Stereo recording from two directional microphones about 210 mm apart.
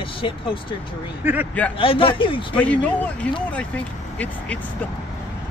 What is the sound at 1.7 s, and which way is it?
Speech, 25° left (ahead or behind).